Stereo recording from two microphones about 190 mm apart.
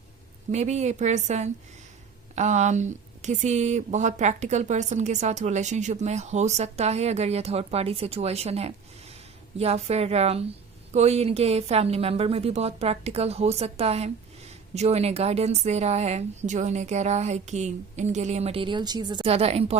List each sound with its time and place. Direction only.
0.5 s a woman's voice: 35° right (ahead or behind)